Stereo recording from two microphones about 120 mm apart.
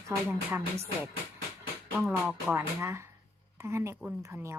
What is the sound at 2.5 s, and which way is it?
Speech, 25° right (ahead or behind).